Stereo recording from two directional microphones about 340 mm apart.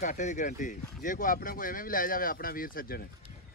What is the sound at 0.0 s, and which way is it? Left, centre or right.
Speech, left.